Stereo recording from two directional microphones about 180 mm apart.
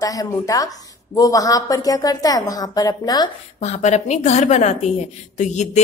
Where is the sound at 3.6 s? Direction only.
40° left (ahead or behind).